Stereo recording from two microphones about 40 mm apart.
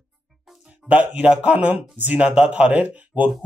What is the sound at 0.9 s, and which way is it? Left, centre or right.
Speech, right.